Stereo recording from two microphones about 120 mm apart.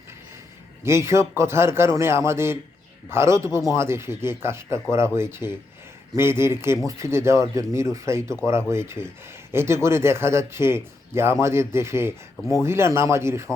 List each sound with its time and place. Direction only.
0.9 s speech: 20° right (ahead or behind)